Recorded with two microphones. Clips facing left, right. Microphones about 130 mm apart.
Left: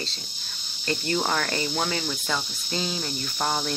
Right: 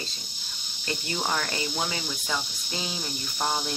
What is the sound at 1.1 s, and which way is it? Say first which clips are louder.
Speech: left 2 dB; 10° right (ahead or behind).